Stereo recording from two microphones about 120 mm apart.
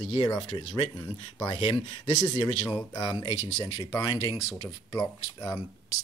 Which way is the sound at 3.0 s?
40° left (ahead or behind).